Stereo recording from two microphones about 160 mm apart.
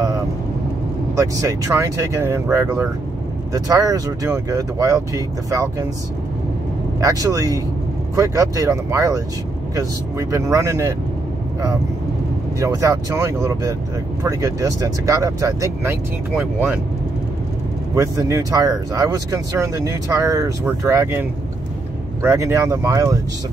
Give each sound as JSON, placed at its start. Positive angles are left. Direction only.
{"t": 1.1, "sound": "speech", "side_deg": -20}
{"t": 7.0, "sound": "speech", "side_deg": -20}
{"t": 12.5, "sound": "speech", "side_deg": -20}
{"t": 17.9, "sound": "speech", "side_deg": -20}